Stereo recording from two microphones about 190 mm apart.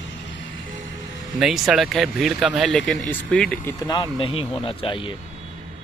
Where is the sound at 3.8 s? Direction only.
20° left (ahead or behind).